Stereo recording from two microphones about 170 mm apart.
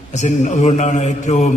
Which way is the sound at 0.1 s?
45° left (ahead or behind).